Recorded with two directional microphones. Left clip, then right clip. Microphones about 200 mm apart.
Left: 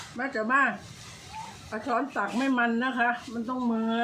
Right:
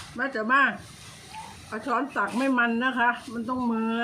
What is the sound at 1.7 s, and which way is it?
Speech, 10° right (ahead or behind).